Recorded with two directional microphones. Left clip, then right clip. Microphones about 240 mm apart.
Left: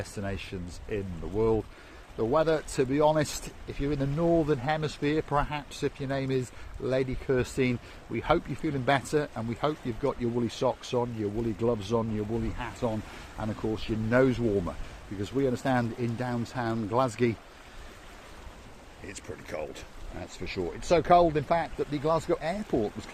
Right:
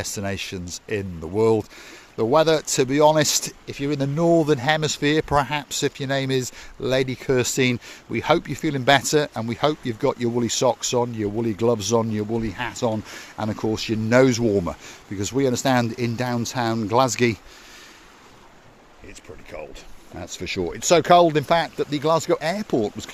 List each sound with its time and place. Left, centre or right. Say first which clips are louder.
0.0 s speech: right 8 dB; right
19.0 s speech: even; centre
20.1 s speech: right 7 dB; right